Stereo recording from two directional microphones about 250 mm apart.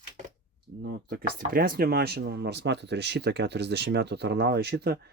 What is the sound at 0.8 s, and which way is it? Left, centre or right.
Speech, right.